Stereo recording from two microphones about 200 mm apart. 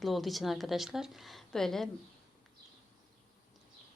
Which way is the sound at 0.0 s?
Centre (ahead or behind).